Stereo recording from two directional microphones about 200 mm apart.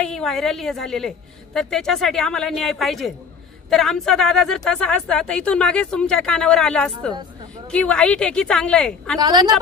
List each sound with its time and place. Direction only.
0.0 s speech: centre (ahead or behind)
9.2 s a woman's voice: 20° right (ahead or behind)